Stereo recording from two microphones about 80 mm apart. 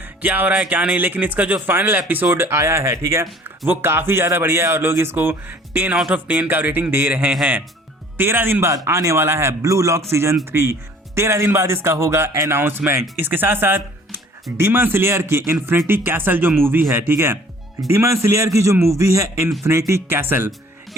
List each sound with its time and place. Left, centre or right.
0.2 s speech: right
8.7 s speech: right